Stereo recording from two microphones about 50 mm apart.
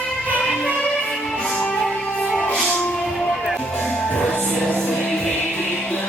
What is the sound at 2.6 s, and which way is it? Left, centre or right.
Music, left.